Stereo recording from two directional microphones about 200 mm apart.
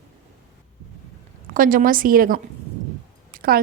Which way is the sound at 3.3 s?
50° right (ahead or behind).